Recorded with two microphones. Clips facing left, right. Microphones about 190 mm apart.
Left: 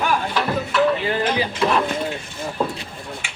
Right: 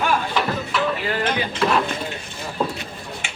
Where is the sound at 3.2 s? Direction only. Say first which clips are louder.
Right 3 dB; 25° right (ahead or behind).